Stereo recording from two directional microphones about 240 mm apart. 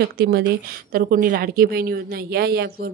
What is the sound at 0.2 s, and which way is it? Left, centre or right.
A woman's voice, right.